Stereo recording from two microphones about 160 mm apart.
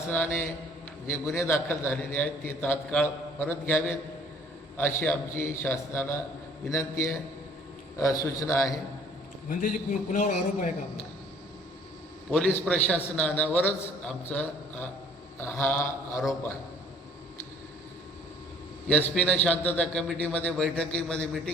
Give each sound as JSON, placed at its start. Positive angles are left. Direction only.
{"t": 0.1, "sound": "a man's voice", "side_deg": 15}
{"t": 9.5, "sound": "a man's voice", "side_deg": 55}
{"t": 12.3, "sound": "a man's voice", "side_deg": 5}
{"t": 19.1, "sound": "a man's voice", "side_deg": 10}